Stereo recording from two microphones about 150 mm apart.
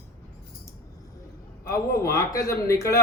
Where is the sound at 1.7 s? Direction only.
20° left (ahead or behind).